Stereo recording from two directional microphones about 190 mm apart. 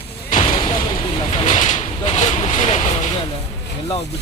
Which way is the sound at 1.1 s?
35° left (ahead or behind).